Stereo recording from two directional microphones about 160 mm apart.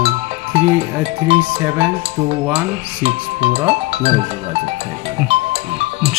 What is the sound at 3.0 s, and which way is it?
Speech, 40° right (ahead or behind).